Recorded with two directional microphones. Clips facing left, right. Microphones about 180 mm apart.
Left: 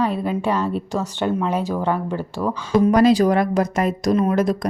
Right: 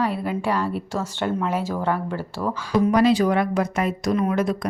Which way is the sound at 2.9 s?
40° left (ahead or behind).